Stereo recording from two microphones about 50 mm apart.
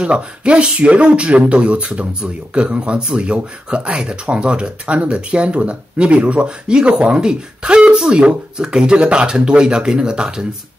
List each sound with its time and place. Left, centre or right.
0.0 s speech: right